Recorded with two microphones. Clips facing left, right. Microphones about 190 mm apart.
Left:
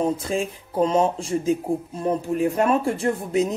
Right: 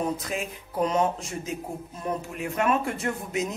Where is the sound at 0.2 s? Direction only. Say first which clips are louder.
Left 7 dB; 30° left (ahead or behind).